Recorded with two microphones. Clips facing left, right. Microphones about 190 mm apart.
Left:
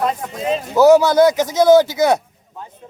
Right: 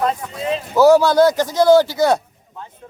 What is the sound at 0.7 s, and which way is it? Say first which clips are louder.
Speech: left 1 dB; 20° left (ahead or behind).